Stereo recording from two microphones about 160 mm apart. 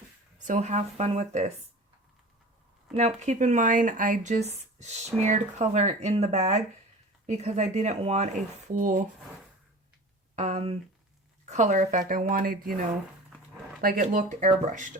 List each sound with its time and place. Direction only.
0.3 s speech: 50° right (ahead or behind)
2.9 s speech: 45° right (ahead or behind)
10.3 s speech: 45° right (ahead or behind); by 12.7 s 60° right (ahead or behind)
14.0 s speech: 50° right (ahead or behind)